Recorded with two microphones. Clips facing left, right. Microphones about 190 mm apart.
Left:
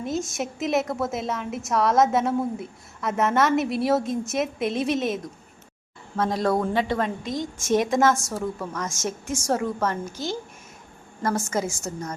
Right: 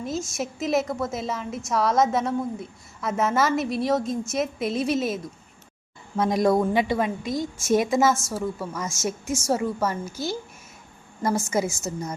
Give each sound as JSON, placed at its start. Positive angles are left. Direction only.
{"t": 0.0, "sound": "a woman's voice", "side_deg": 0}
{"t": 6.1, "sound": "a woman's voice", "side_deg": -15}